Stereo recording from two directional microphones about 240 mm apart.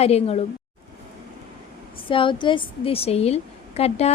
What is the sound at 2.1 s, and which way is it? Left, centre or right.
A woman's voice, left.